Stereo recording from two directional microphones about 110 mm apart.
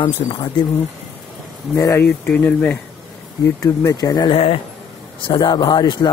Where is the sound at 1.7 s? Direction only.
25° left (ahead or behind).